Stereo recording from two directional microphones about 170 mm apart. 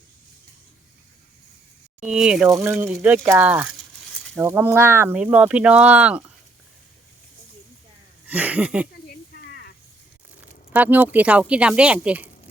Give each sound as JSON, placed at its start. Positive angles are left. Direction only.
{"t": 2.0, "sound": "speech", "side_deg": -5}
{"t": 8.3, "sound": "speech", "side_deg": -10}
{"t": 9.0, "sound": "a sound", "side_deg": 70}
{"t": 10.7, "sound": "speech", "side_deg": -10}